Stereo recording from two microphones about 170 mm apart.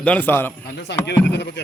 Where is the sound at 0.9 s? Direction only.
90° left.